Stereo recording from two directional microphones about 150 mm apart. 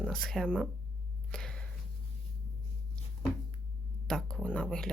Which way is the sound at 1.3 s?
5° left (ahead or behind).